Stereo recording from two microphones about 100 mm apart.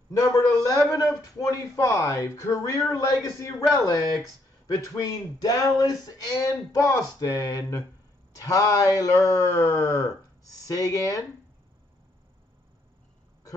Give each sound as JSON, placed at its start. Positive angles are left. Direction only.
{"t": 0.1, "sound": "speech", "side_deg": 35}